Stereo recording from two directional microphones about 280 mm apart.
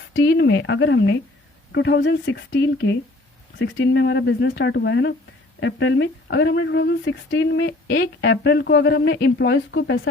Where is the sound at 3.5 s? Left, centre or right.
Left.